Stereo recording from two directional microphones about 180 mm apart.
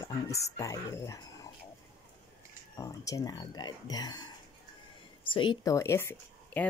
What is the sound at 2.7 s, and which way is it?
Speech, 20° left (ahead or behind).